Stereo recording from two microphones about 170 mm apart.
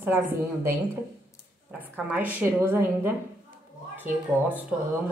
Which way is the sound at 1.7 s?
10° right (ahead or behind).